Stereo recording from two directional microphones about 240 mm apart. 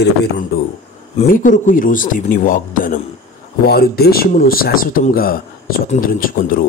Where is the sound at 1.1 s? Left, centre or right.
Left.